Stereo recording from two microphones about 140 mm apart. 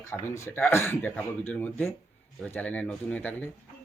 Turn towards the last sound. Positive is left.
turn(degrees=10)  # may be behind; listen again after turning